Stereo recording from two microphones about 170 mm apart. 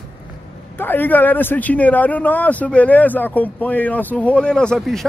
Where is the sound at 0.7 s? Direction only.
10° left (ahead or behind).